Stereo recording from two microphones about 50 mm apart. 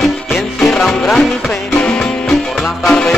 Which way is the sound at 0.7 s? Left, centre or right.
Centre.